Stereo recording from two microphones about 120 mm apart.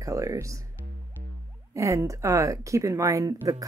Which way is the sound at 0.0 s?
30° right (ahead or behind).